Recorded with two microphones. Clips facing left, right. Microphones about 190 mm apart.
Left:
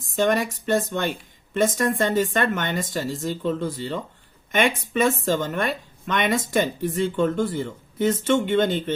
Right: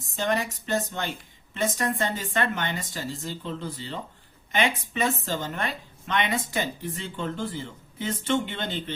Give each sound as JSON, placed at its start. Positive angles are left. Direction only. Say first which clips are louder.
{"t": 0.3, "sound": "speech", "louder": "left 2 dB", "side_deg": 50}